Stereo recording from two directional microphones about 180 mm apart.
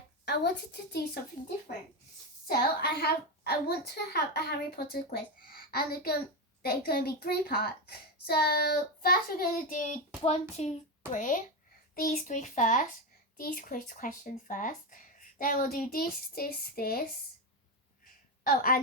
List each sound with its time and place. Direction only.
0.3 s a woman's voice: 65° left (ahead or behind)
2.5 s a woman's voice: 60° left (ahead or behind)
18.4 s speech: 55° left (ahead or behind)